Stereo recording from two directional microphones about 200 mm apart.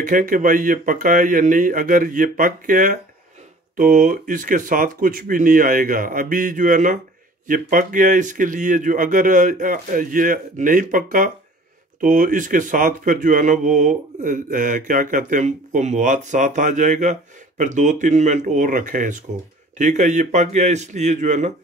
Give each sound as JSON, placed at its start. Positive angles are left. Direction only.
{"t": 0.0, "sound": "speech", "side_deg": -40}